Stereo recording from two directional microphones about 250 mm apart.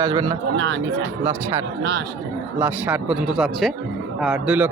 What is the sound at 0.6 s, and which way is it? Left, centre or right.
Speech, right.